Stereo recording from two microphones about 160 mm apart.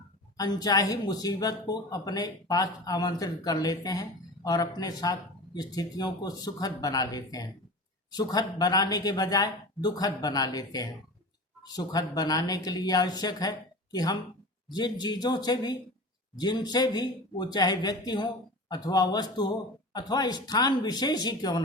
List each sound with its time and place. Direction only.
0.3 s speech: 25° left (ahead or behind)